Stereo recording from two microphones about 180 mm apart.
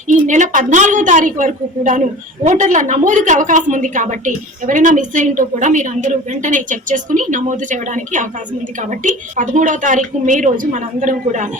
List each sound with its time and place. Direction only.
0.3 s a woman's voice: 45° right (ahead or behind)